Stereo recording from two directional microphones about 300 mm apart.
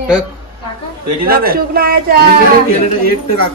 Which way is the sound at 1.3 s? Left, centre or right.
Right.